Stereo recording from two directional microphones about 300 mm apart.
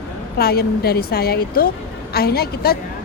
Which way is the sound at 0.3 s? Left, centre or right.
Left.